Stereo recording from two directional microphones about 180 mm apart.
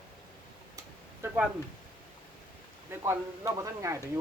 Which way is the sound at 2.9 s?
15° right (ahead or behind).